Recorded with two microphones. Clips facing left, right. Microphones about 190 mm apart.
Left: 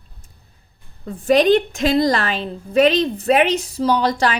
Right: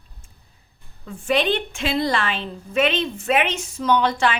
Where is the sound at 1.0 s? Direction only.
40° left (ahead or behind).